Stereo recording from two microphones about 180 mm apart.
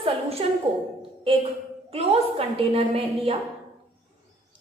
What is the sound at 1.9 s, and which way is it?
A woman's voice, 35° right (ahead or behind).